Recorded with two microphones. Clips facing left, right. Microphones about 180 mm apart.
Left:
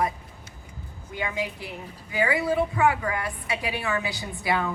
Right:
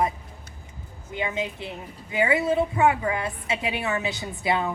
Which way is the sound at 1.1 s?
25° right (ahead or behind).